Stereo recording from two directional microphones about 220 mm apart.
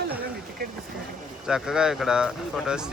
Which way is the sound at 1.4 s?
5° right (ahead or behind).